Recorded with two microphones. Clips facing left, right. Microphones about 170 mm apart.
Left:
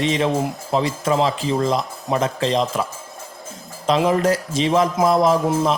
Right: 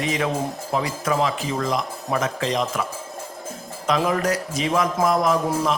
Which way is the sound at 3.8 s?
25° left (ahead or behind).